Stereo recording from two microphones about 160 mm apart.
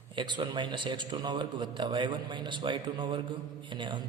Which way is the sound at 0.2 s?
30° right (ahead or behind).